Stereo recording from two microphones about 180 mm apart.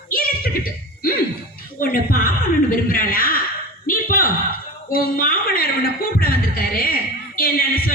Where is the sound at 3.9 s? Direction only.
50° left (ahead or behind).